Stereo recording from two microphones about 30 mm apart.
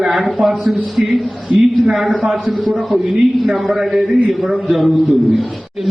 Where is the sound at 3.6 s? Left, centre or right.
Centre.